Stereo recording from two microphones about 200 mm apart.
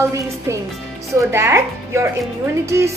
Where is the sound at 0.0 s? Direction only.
15° right (ahead or behind).